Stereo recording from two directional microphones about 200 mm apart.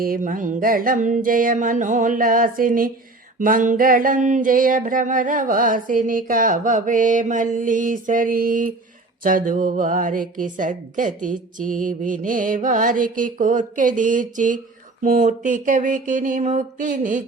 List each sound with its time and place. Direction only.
0.0 s music: 45° right (ahead or behind)
9.2 s a woman's voice: 45° right (ahead or behind)